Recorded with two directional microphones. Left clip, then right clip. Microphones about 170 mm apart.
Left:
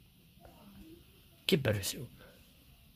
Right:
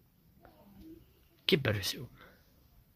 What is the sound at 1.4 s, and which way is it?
Speech, 5° right (ahead or behind).